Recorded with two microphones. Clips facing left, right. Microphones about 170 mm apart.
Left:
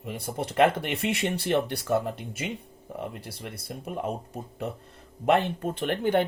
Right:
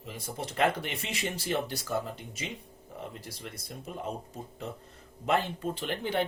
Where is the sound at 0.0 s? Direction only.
60° left (ahead or behind).